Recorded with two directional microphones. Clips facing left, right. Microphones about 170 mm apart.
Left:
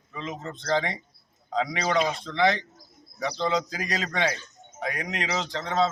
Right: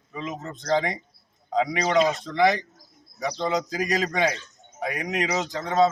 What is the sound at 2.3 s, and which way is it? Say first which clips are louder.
A man's voice: right 1 dB; 10° right (ahead or behind).